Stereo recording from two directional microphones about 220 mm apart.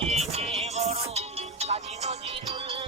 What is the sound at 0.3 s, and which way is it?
Music, 30° right (ahead or behind).